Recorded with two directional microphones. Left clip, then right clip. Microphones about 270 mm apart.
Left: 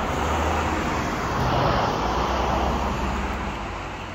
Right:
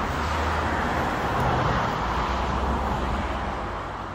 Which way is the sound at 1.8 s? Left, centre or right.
Left.